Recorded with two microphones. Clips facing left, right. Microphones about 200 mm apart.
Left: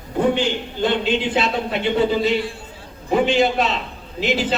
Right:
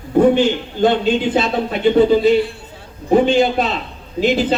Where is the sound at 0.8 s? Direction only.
45° right (ahead or behind).